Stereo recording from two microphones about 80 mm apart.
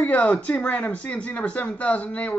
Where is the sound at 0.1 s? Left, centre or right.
Centre.